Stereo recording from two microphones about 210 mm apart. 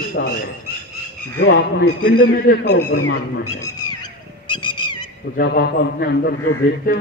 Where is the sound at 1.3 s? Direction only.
80° left.